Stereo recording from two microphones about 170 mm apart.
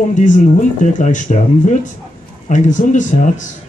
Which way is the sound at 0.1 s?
50° left (ahead or behind).